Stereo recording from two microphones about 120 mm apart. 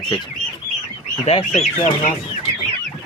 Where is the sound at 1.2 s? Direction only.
60° left (ahead or behind).